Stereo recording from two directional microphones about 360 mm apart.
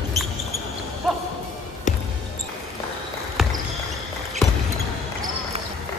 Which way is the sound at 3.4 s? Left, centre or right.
Centre.